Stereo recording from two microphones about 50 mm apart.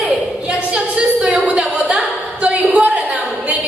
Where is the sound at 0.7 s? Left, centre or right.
Right.